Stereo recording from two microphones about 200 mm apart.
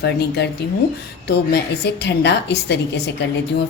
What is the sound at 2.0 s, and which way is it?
Speech, 60° left (ahead or behind).